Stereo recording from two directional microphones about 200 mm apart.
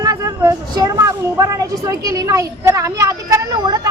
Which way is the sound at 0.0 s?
15° right (ahead or behind).